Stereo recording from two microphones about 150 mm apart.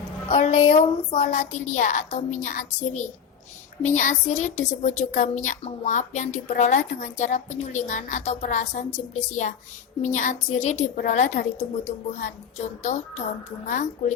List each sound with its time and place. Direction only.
0.3 s a woman's voice: 50° left (ahead or behind)
10.0 s a woman's voice: 55° left (ahead or behind)
11.9 s a woman's voice: 55° left (ahead or behind)